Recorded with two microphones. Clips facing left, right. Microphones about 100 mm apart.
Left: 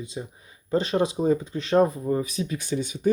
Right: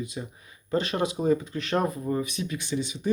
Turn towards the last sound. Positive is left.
turn(degrees=45)  # may be behind; listen again after turning